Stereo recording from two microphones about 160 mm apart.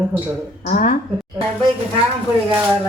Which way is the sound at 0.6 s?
50° left (ahead or behind).